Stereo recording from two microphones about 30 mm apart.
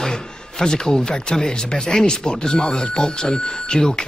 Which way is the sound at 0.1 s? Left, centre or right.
Left.